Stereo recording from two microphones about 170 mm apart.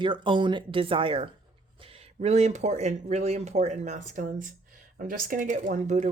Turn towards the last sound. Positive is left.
turn(degrees=-45)  # may be behind; listen again after turning